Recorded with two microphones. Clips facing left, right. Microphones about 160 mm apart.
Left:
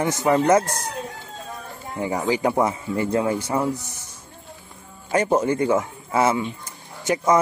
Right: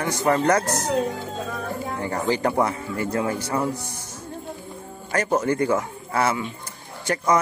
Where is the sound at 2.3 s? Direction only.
10° left (ahead or behind).